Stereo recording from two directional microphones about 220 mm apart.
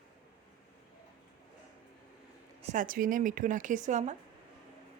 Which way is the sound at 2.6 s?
35° right (ahead or behind).